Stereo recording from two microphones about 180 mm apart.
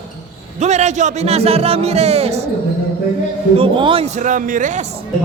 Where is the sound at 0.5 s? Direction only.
40° right (ahead or behind).